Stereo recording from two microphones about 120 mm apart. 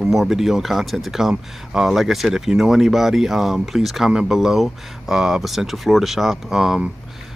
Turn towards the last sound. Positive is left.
turn(degrees=-5)  # may be behind; listen again after turning